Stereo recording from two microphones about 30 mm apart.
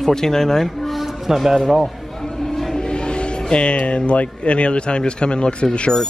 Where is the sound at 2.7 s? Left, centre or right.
Left.